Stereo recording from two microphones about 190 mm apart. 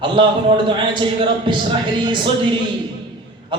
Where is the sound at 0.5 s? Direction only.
25° right (ahead or behind).